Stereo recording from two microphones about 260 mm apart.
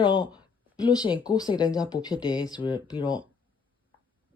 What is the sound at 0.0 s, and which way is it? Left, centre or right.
Speech, centre.